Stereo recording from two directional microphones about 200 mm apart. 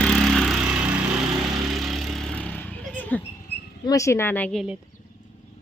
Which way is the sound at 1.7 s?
Centre (ahead or behind).